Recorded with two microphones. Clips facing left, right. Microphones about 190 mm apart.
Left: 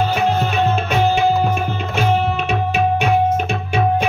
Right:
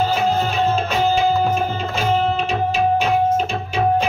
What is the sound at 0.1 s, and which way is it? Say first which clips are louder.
Music: left 1 dB; 60° left (ahead or behind).